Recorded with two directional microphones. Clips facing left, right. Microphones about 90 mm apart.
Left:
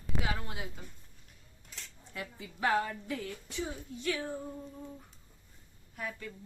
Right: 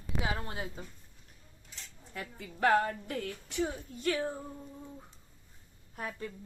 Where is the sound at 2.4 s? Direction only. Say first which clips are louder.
Right 4 dB; 55° right (ahead or behind).